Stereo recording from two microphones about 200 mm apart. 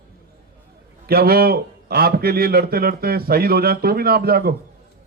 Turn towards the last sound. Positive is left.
turn(degrees=-50)  # may be behind; listen again after turning